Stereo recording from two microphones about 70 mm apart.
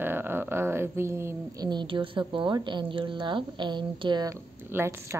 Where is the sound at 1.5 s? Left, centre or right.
Right.